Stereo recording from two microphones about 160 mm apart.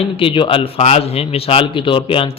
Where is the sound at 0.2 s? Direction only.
35° left (ahead or behind).